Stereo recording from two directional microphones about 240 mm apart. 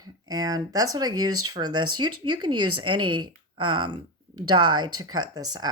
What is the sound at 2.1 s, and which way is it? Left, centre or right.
Speech, right.